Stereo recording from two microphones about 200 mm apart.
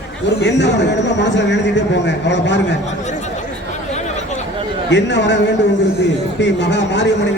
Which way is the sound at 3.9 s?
35° left (ahead or behind).